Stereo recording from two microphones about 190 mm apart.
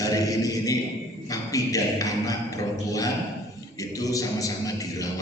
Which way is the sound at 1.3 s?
20° left (ahead or behind).